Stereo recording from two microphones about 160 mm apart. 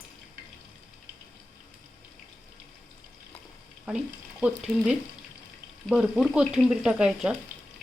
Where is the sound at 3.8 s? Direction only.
5° right (ahead or behind).